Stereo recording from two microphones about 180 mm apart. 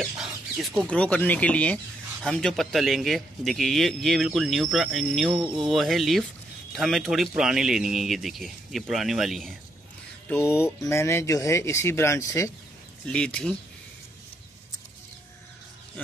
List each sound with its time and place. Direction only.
0.0 s a man's voice: centre (ahead or behind)
10.3 s a man's voice: 15° left (ahead or behind)